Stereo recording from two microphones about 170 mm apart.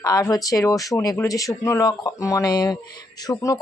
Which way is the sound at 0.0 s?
20° left (ahead or behind).